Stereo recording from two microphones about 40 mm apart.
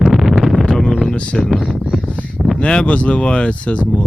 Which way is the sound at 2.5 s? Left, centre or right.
Left.